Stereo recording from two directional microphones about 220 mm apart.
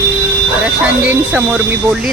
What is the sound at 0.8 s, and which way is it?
Speech, 5° right (ahead or behind).